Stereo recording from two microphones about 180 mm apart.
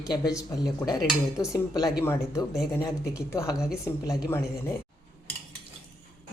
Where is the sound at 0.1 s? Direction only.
20° left (ahead or behind).